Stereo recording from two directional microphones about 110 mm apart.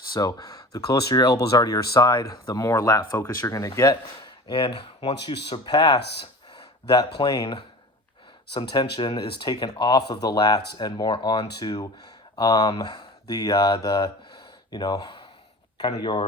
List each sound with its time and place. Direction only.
0.1 s speech: 35° left (ahead or behind)
7.3 s speech: 35° left (ahead or behind)